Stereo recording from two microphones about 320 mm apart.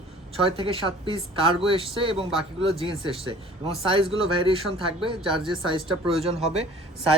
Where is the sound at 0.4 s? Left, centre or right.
Centre.